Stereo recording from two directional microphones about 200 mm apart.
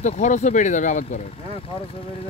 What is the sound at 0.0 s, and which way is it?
Speech, 35° left (ahead or behind).